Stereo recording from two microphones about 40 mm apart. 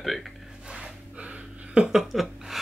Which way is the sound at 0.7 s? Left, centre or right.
Right.